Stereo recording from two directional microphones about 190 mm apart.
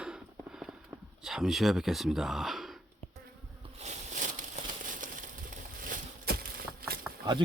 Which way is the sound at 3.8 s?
40° right (ahead or behind).